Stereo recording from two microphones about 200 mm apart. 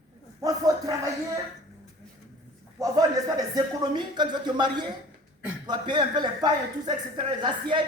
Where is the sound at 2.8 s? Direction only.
20° right (ahead or behind).